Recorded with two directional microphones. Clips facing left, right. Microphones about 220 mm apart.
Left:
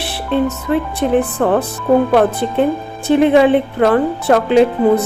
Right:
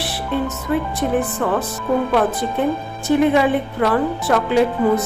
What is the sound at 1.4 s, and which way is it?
Speech, 50° left (ahead or behind).